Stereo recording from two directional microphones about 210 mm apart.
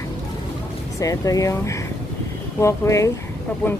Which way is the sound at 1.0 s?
15° left (ahead or behind).